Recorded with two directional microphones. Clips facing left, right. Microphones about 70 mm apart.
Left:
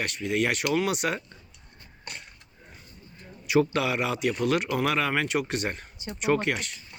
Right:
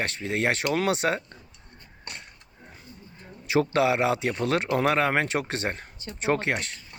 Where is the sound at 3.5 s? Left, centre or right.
Right.